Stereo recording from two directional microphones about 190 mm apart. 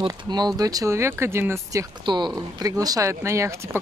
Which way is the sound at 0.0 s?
25° right (ahead or behind).